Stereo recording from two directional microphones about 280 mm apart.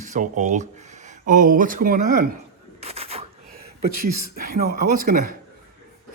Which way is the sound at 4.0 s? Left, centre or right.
Right.